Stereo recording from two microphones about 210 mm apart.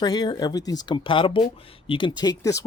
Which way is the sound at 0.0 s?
20° left (ahead or behind).